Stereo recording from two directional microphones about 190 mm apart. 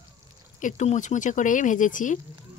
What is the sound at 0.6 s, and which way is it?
Speech, 40° left (ahead or behind).